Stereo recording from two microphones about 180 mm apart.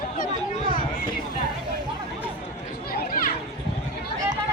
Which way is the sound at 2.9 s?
50° left (ahead or behind).